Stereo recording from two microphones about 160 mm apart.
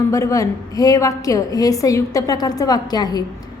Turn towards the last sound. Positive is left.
turn(degrees=25)  # may be behind; listen again after turning